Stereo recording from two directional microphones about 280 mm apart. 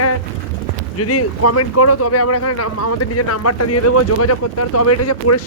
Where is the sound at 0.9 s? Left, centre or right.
Left.